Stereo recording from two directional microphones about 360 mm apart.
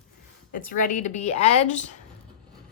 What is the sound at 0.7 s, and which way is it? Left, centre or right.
A woman's voice, centre.